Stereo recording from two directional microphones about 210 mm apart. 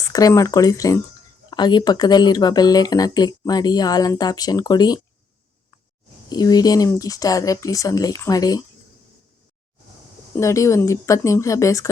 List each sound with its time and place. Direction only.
0.0 s speech: 15° left (ahead or behind)
6.2 s speech: 20° left (ahead or behind)
10.3 s speech: 15° left (ahead or behind)